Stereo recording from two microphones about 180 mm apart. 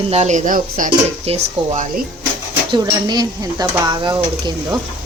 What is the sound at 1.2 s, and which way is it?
Speech, 40° right (ahead or behind).